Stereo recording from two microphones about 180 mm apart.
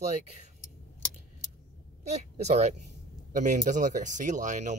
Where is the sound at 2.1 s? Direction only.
35° right (ahead or behind).